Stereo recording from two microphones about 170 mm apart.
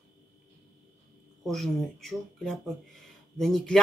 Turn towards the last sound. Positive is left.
turn(degrees=0)  # may be behind; listen again after turning